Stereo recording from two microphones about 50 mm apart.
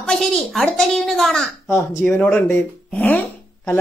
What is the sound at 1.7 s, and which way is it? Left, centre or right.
Speech, left.